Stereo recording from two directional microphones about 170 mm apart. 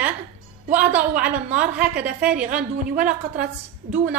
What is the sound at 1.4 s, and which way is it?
Speech, 10° right (ahead or behind).